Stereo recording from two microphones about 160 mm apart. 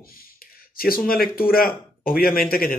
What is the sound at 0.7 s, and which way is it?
Speech, 65° left (ahead or behind).